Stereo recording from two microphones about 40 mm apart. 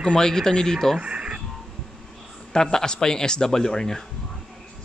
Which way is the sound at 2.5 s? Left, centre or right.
Centre.